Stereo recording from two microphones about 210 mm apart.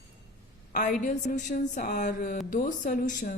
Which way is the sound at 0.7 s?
40° left (ahead or behind).